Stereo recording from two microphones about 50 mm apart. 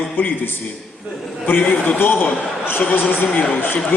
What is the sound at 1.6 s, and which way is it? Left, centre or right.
A man's voice, left.